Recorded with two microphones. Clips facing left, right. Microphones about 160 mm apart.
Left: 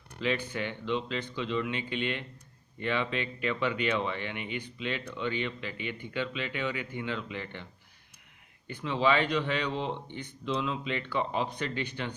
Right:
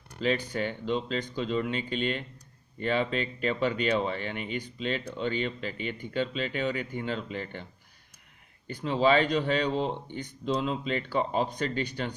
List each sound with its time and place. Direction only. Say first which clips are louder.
0.2 s speech: right 3 dB; 40° right (ahead or behind)